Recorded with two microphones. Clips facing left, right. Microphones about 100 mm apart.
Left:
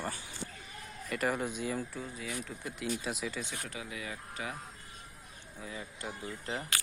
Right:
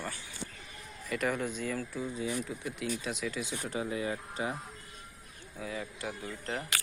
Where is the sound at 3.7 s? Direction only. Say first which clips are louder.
Right 8 dB; 35° right (ahead or behind).